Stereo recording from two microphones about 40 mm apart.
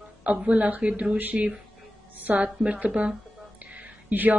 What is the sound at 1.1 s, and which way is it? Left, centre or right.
Speech, right.